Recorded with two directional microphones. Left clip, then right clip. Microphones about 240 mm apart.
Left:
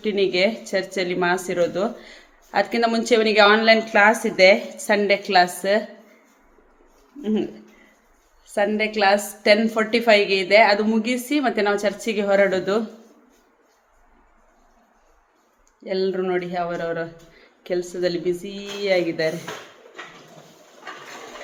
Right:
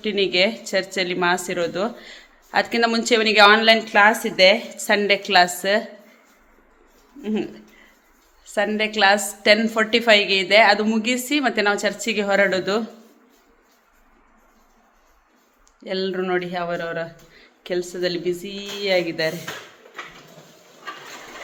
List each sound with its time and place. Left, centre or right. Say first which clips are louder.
0.0 s speech: even; centre
7.2 s speech: left 2 dB; centre
15.8 s speech: left 2 dB; centre